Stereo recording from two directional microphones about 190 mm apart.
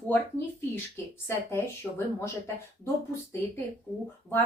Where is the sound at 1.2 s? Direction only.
15° left (ahead or behind).